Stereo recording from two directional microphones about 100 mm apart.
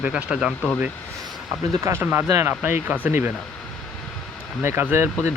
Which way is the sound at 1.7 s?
30° right (ahead or behind).